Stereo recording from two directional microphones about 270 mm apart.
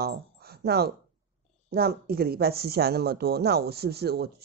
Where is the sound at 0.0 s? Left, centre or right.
Right.